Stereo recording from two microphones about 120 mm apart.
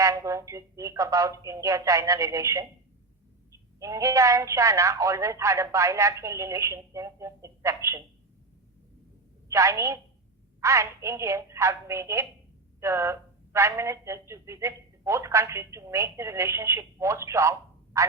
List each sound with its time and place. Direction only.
0.0 s speech: 25° right (ahead or behind)
3.8 s speech: 25° right (ahead or behind)
9.5 s speech: 25° right (ahead or behind)
18.0 s a sound: 25° right (ahead or behind)